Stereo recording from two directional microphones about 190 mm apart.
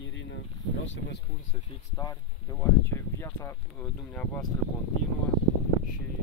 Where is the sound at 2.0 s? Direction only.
15° left (ahead or behind).